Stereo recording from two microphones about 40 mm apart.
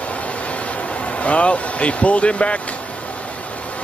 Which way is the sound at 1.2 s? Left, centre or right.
Left.